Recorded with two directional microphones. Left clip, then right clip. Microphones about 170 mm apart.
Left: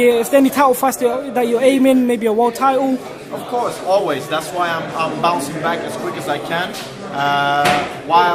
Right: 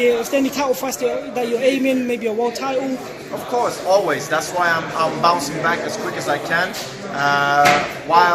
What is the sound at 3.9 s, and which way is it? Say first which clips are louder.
A man's voice: even; centre (ahead or behind).